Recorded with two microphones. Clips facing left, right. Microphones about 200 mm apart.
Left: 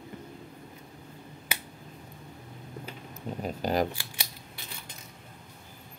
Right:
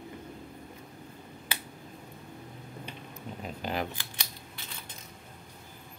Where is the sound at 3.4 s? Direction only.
40° left (ahead or behind).